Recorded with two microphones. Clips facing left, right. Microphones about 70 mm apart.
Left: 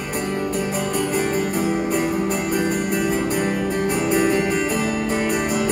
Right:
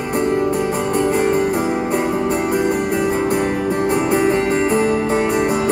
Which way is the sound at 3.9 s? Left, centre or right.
Right.